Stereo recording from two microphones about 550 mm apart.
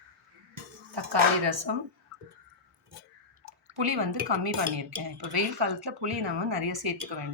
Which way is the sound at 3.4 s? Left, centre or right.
Right.